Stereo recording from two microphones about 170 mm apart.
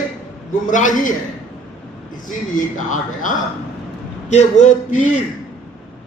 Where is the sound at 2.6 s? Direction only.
50° left (ahead or behind).